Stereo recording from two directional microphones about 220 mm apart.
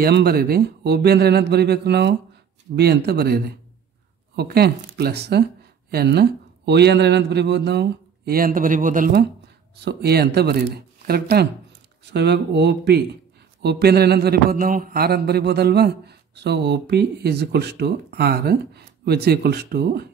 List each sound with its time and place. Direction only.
0.0 s a man's voice: 45° right (ahead or behind)